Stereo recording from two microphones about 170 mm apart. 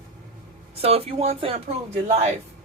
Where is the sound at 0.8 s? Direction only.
35° right (ahead or behind).